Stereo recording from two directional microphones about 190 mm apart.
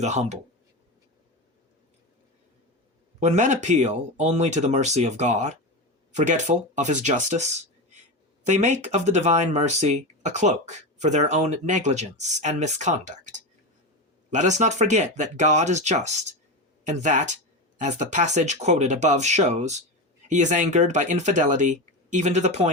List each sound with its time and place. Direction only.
0.0 s speech: 35° right (ahead or behind)
3.2 s speech: 40° right (ahead or behind)